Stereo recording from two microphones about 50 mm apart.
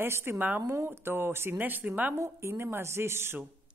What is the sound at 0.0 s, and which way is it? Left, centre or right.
A man's voice, right.